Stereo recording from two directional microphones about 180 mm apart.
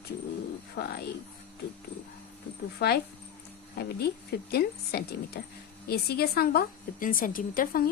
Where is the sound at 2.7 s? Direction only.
60° left (ahead or behind).